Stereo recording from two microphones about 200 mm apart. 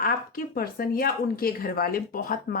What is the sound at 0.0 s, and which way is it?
Speech, 45° left (ahead or behind).